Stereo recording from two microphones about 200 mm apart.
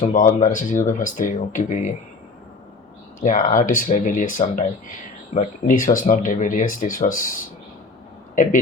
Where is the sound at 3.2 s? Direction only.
40° left (ahead or behind).